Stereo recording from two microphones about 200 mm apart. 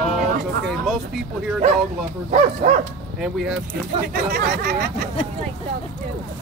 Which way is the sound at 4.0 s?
50° right (ahead or behind).